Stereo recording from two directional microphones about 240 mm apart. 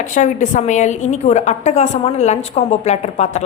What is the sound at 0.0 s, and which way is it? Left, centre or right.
A woman's voice, left.